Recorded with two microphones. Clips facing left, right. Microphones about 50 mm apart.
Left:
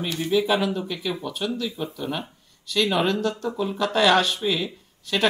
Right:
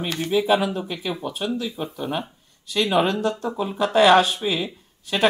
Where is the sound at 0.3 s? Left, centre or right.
Centre.